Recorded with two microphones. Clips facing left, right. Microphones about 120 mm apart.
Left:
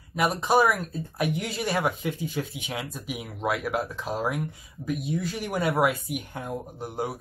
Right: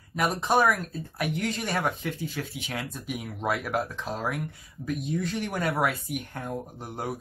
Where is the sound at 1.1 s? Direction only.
15° left (ahead or behind).